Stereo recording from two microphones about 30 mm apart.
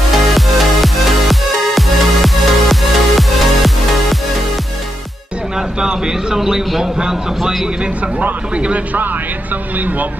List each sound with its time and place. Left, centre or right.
0.1 s music: centre
5.8 s speech: right
8.5 s speech: right